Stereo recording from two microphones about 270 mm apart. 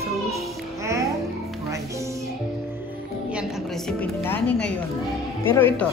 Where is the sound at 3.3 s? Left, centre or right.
Centre.